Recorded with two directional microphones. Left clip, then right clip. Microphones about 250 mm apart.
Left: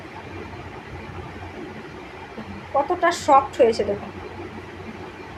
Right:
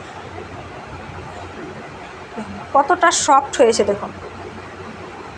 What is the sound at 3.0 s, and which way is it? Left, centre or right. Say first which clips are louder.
Speech: right 3 dB; centre.